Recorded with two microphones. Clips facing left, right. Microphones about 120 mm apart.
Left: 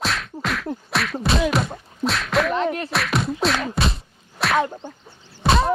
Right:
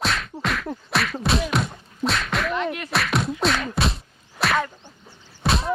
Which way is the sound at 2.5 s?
35° left (ahead or behind).